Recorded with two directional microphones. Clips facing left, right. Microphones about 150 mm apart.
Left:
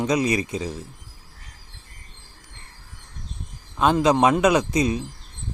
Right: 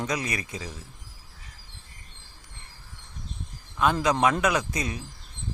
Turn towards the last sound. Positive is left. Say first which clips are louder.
# left 8 dB
turn(degrees=20)  # may be behind; listen again after turning